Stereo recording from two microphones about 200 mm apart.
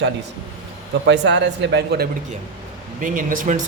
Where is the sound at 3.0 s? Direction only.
40° right (ahead or behind).